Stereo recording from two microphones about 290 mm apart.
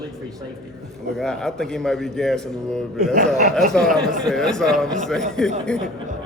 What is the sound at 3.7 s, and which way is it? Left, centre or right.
A man's voice, centre.